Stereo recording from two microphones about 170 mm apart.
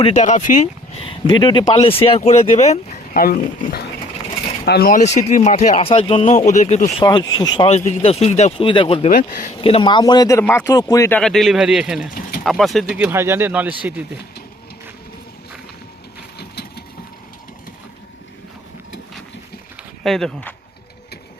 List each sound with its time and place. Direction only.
0.0 s speech: 45° left (ahead or behind)
1.0 s speech: 30° left (ahead or behind)
3.2 s speech: 60° left (ahead or behind)
4.6 s speech: 75° left (ahead or behind)
4.9 s speech: 45° left (ahead or behind)
6.2 s speech: 45° left (ahead or behind)
7.0 s speech: 25° left (ahead or behind)
7.7 s speech: 40° left (ahead or behind)
9.0 s speech: 50° left (ahead or behind)
9.6 s speech: 30° left (ahead or behind)
11.2 s a man's voice: centre (ahead or behind)
13.0 s speech: 15° right (ahead or behind)
16.4 s a sound: 70° left (ahead or behind)
20.1 s a man's voice: 5° left (ahead or behind)